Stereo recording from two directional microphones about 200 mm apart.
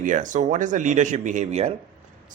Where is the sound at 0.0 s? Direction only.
40° right (ahead or behind).